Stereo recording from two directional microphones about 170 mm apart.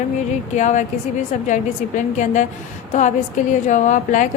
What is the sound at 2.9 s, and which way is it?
A woman's voice, 45° left (ahead or behind).